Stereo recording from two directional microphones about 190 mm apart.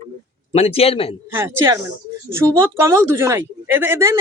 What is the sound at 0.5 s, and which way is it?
Speech, 30° left (ahead or behind).